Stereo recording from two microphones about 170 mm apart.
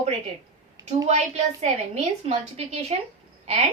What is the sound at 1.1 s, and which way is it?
A woman's voice, 40° right (ahead or behind).